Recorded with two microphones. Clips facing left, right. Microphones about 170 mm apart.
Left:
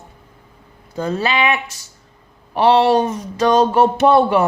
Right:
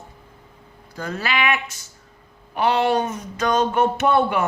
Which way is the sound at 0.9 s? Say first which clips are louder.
Left 6 dB; 25° left (ahead or behind).